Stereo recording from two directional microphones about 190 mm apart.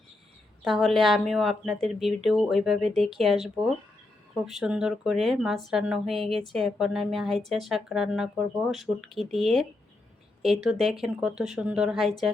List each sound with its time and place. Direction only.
0.6 s a woman's voice: centre (ahead or behind)
4.4 s a woman's voice: 5° right (ahead or behind)